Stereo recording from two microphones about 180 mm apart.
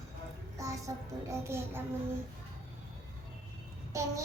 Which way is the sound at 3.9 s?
15° right (ahead or behind).